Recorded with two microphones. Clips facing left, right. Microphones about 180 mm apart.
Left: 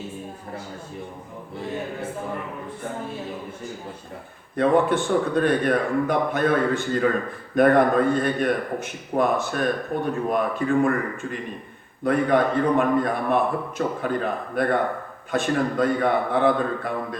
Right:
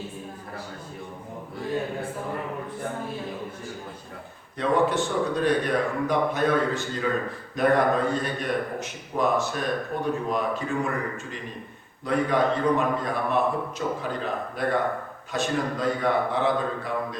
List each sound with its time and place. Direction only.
4.5 s a man's voice: 55° left (ahead or behind)